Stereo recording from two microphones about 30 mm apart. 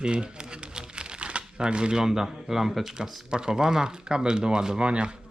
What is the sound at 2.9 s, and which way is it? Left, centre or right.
Speech, centre.